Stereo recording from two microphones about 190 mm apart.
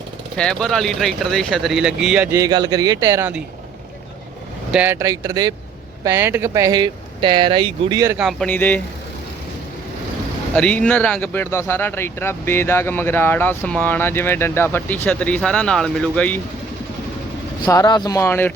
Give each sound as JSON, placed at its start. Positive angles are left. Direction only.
{"t": 0.3, "sound": "speech", "side_deg": 5}
{"t": 4.7, "sound": "speech", "side_deg": -10}
{"t": 8.2, "sound": "speech", "side_deg": 0}
{"t": 10.5, "sound": "speech", "side_deg": 5}
{"t": 17.7, "sound": "speech", "side_deg": 20}